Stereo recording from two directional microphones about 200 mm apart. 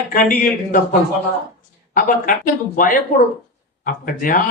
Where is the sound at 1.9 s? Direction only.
45° left (ahead or behind).